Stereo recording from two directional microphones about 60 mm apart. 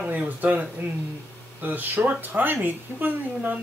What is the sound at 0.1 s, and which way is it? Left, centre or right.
Speech, right.